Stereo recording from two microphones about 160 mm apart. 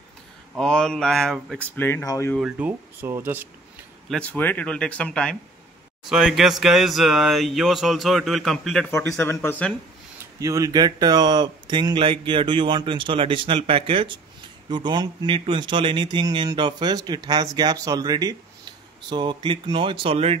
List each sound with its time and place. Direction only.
0.6 s speech: 5° left (ahead or behind)
1.8 s speech: 10° left (ahead or behind)
2.3 s speech: 10° right (ahead or behind)
4.1 s speech: 10° left (ahead or behind)
9.2 s speech: 15° left (ahead or behind)
10.1 s speech: 20° right (ahead or behind); by 20.3 s 35° right (ahead or behind)